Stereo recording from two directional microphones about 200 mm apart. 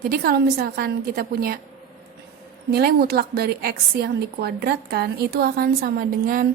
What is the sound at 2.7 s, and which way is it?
A woman's voice, 50° right (ahead or behind).